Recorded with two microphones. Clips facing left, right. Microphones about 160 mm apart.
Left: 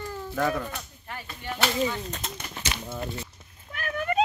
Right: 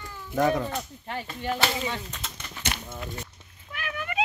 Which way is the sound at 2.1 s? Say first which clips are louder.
Left 4 dB; 45° left (ahead or behind).